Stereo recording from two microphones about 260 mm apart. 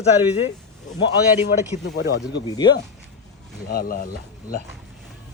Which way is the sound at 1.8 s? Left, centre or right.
Left.